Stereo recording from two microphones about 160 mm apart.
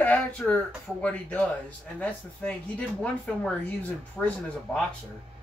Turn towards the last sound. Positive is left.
turn(degrees=10)  # may be behind; listen again after turning